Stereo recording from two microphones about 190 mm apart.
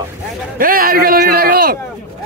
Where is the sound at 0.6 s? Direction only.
50° right (ahead or behind).